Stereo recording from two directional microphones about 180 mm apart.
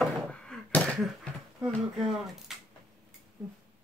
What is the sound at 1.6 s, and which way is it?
Speech, centre (ahead or behind).